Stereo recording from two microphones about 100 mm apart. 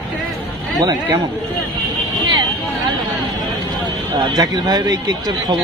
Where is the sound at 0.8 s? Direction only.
45° right (ahead or behind).